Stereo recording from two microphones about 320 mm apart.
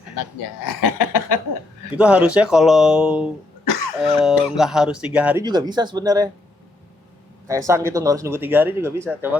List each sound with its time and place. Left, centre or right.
0.2 s speech: left
2.0 s speech: centre
7.4 s speech: centre